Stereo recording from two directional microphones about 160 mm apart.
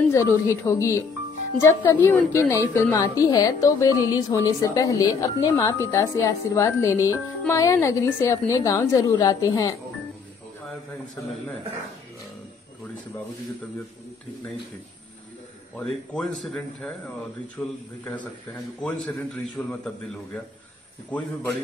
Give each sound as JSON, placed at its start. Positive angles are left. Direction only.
{"t": 0.1, "sound": "a woman's voice", "side_deg": 20}
{"t": 16.1, "sound": "a woman's voice", "side_deg": 5}
{"t": 18.8, "sound": "a man's voice", "side_deg": 5}
{"t": 21.1, "sound": "a woman's voice", "side_deg": 10}